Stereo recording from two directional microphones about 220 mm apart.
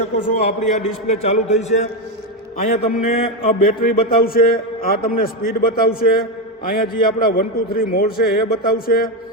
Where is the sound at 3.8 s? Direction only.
40° left (ahead or behind).